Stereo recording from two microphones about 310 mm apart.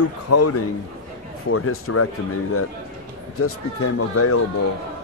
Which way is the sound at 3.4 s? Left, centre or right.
Left.